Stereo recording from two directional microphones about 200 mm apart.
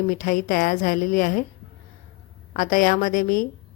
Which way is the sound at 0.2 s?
40° left (ahead or behind).